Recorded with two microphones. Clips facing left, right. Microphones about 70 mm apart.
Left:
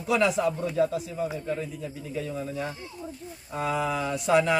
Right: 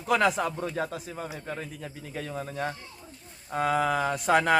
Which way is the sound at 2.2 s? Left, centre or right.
Right.